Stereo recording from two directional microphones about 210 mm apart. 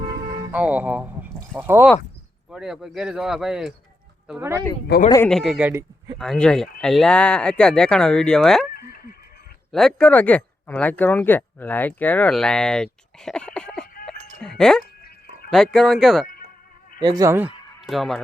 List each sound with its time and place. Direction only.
0.5 s speech: 5° right (ahead or behind)
5.0 s speech: 15° left (ahead or behind)
5.3 s speech: centre (ahead or behind)
8.7 s goat: 45° left (ahead or behind)
9.7 s speech: 5° left (ahead or behind)
14.0 s a sound: 5° left (ahead or behind)
15.4 s speech: centre (ahead or behind)
17.0 s speech: 20° right (ahead or behind); by 18.2 s centre (ahead or behind)